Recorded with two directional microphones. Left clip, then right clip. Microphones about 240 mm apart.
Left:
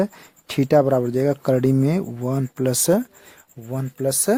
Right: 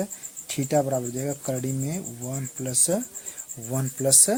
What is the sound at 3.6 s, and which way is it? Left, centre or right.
Speech, centre.